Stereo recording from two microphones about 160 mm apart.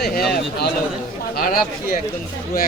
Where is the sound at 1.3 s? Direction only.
65° left (ahead or behind).